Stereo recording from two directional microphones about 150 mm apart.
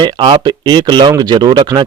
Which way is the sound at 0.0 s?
30° right (ahead or behind).